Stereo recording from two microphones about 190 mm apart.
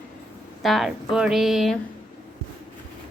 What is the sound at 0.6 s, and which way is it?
A woman's voice, centre (ahead or behind).